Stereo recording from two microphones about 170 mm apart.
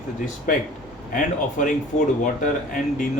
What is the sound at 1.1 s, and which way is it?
Speech, 50° left (ahead or behind).